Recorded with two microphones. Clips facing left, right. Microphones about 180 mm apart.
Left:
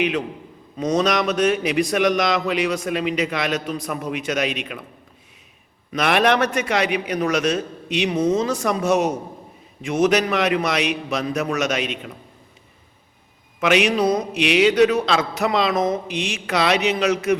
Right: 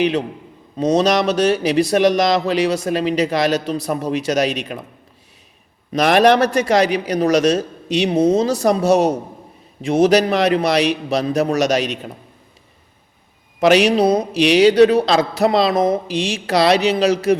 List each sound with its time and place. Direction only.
0.0 s a man's voice: 35° right (ahead or behind)
5.9 s a man's voice: 40° right (ahead or behind)
13.6 s a man's voice: 35° right (ahead or behind)